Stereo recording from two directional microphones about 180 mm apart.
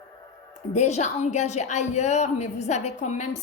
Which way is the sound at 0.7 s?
40° left (ahead or behind).